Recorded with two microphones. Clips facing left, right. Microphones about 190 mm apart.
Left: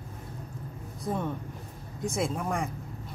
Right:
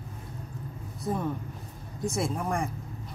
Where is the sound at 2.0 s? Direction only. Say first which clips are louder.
Even; centre (ahead or behind).